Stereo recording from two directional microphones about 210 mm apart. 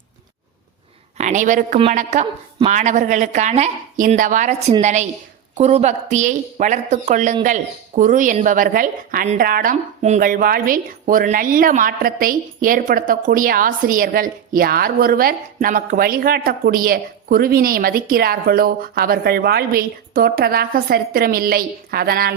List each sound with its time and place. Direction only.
1.2 s speech: 35° right (ahead or behind)